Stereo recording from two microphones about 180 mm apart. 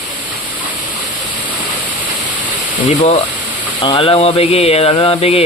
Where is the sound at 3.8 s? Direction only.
30° left (ahead or behind).